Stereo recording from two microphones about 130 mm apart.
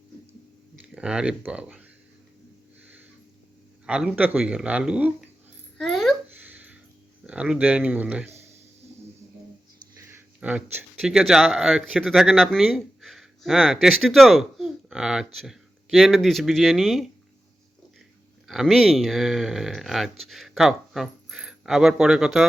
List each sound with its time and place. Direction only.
0.9 s speech: 10° right (ahead or behind)
3.8 s speech: 10° right (ahead or behind)
5.7 s babbling: centre (ahead or behind)
6.3 s a sound: 15° right (ahead or behind)
7.3 s speech: 10° right (ahead or behind)
10.0 s speech: 15° right (ahead or behind)
18.4 s speech: centre (ahead or behind)